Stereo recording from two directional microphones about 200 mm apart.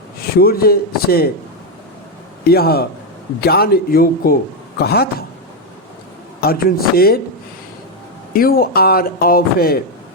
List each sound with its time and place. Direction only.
0.3 s speech: 50° left (ahead or behind)
2.5 s speech: 50° left (ahead or behind)
6.4 s speech: 50° left (ahead or behind)
8.3 s speech: 45° left (ahead or behind)